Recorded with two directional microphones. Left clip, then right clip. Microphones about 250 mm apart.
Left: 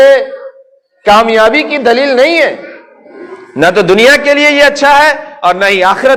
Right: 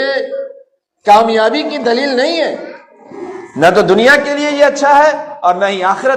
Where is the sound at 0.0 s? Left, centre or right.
Left.